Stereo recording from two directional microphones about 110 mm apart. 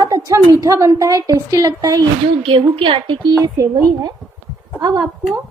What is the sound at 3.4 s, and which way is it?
Speech, 30° right (ahead or behind).